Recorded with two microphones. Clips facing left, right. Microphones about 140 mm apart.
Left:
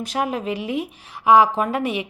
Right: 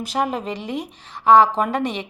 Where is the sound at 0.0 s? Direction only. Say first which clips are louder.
Right 1 dB; centre (ahead or behind).